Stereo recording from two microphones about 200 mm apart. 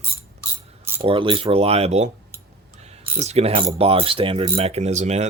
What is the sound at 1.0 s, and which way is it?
Speech, 25° right (ahead or behind).